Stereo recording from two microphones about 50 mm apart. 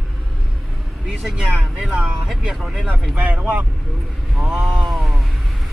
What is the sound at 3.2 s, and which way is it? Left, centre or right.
Speech, right.